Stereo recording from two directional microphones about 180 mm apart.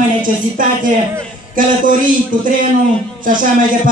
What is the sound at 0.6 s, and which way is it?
A man's voice, 50° right (ahead or behind).